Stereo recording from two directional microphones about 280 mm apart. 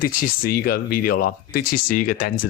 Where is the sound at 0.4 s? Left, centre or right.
Left.